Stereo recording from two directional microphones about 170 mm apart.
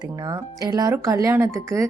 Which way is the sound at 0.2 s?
20° right (ahead or behind).